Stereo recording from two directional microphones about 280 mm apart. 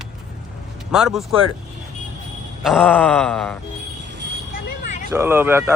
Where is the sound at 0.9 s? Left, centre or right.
Centre.